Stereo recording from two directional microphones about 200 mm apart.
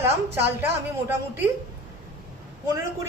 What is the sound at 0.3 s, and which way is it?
A woman's voice, 10° right (ahead or behind).